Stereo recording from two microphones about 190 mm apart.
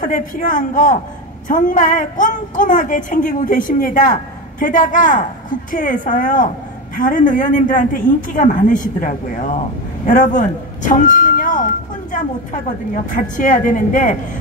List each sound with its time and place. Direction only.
0.0 s a woman's voice: 45° left (ahead or behind)